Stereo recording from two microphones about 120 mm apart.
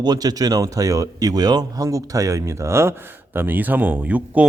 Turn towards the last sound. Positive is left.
turn(degrees=-10)  # may be behind; listen again after turning